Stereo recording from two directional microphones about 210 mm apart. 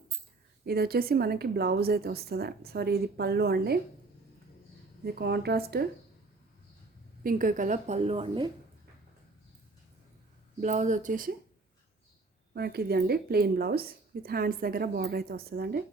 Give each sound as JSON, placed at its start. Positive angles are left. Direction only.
{"t": 0.6, "sound": "speech", "side_deg": -45}
{"t": 5.0, "sound": "speech", "side_deg": -50}
{"t": 7.3, "sound": "a woman's voice", "side_deg": -40}
{"t": 10.6, "sound": "a woman's voice", "side_deg": -35}
{"t": 12.5, "sound": "speech", "side_deg": -50}